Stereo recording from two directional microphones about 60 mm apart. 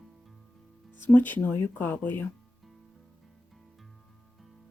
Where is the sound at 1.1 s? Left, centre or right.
Left.